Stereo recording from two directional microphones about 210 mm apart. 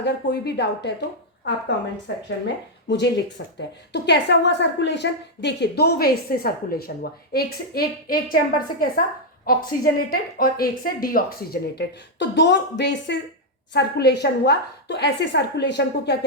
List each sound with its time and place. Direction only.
0.0 s a woman's voice: 55° left (ahead or behind)
2.1 s a woman's voice: 60° left (ahead or behind)